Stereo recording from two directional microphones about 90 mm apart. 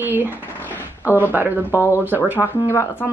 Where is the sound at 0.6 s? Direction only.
20° left (ahead or behind).